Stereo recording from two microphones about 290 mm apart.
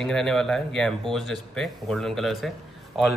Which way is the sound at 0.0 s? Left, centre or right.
Centre.